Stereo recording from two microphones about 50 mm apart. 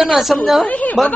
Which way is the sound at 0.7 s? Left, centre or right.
Left.